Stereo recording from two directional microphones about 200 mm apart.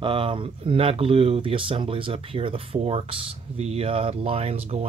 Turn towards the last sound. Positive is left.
turn(degrees=-30)  # may be behind; listen again after turning